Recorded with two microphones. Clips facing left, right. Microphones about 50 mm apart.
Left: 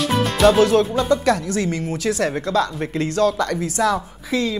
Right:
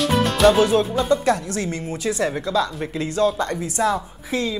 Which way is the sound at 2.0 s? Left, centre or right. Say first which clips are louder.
Even; left.